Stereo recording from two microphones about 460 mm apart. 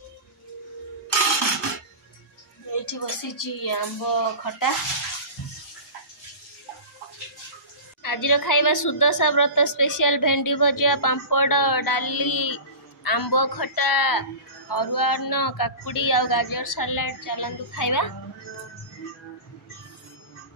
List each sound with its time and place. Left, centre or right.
2.7 s a woman's voice: left
8.0 s a woman's voice: left